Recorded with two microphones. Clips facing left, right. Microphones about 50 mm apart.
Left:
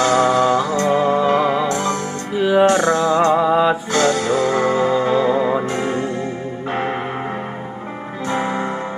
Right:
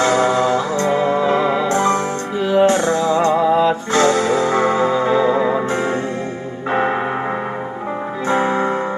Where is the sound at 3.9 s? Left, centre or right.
Right.